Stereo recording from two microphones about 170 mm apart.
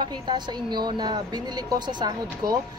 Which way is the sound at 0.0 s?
25° right (ahead or behind).